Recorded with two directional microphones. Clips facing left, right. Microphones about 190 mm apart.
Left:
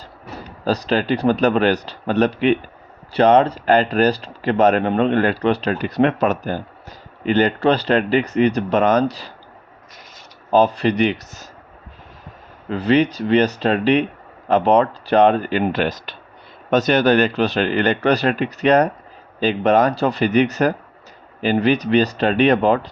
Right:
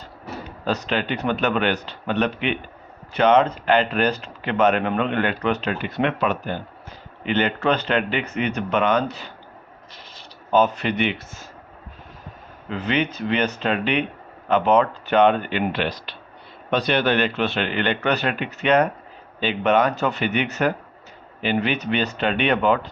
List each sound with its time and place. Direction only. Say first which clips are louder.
0.6 s speech: left 5 dB; 35° left (ahead or behind)
10.5 s speech: left 4 dB; 35° left (ahead or behind)
12.6 s speech: left 7 dB; 35° left (ahead or behind)